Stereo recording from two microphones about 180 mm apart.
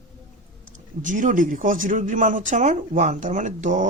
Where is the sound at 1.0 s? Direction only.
45° right (ahead or behind).